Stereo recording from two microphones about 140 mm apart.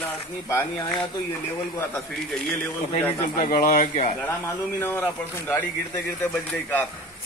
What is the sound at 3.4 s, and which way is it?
Speech, 70° left (ahead or behind).